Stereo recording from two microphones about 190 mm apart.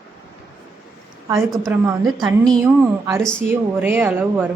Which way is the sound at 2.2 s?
5° left (ahead or behind).